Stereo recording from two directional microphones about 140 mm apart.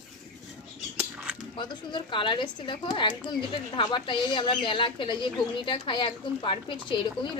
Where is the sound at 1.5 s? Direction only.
35° left (ahead or behind).